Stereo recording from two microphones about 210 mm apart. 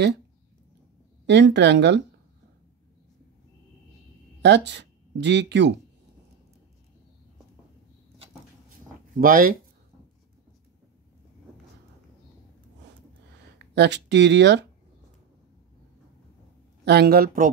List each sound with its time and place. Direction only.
1.2 s speech: 55° right (ahead or behind)
4.4 s speech: 55° right (ahead or behind)
9.1 s speech: 40° right (ahead or behind)
13.7 s speech: 55° right (ahead or behind)
16.8 s speech: 50° right (ahead or behind)